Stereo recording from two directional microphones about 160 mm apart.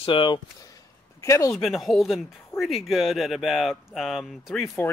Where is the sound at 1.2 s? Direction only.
20° left (ahead or behind).